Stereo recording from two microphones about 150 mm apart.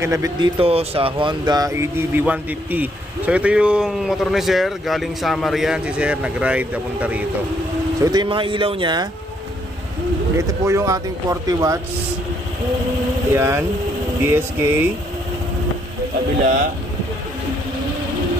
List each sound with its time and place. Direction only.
0.0 s speech: 20° right (ahead or behind)
0.4 s speech: 40° right (ahead or behind); by 7.2 s 10° right (ahead or behind)
8.0 s speech: 30° right (ahead or behind)
10.3 s speech: 20° right (ahead or behind)
13.3 s speech: 15° right (ahead or behind)